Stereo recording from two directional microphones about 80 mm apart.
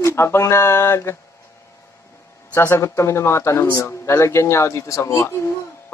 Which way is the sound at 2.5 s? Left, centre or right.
Left.